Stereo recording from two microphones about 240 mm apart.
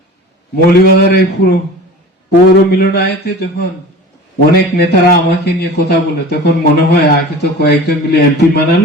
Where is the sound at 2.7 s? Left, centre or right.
Left.